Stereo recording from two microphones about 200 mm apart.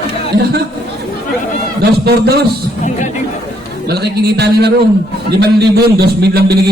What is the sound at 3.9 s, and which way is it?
A man's voice, 55° right (ahead or behind).